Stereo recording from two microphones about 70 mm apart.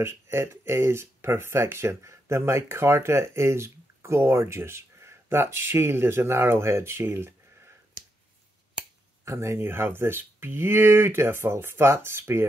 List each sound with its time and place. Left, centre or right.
0.0 s speech: right
9.2 s speech: right